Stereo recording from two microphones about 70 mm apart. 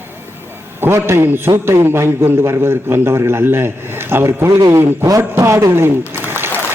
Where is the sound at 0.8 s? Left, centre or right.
Right.